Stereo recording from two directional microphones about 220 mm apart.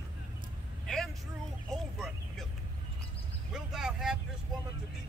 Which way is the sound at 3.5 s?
5° right (ahead or behind).